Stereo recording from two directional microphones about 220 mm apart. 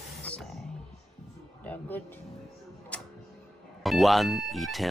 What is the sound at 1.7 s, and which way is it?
Speech, 10° left (ahead or behind).